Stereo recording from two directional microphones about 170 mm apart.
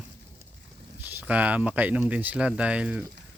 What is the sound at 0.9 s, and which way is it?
Speech, 10° right (ahead or behind).